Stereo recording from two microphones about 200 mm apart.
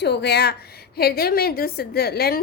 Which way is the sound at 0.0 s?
55° left (ahead or behind).